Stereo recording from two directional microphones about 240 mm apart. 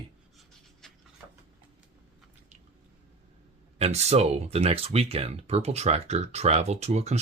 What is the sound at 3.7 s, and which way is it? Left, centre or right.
Speech, right.